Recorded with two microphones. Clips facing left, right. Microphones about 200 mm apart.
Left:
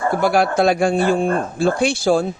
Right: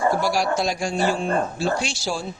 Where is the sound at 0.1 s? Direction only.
55° left (ahead or behind).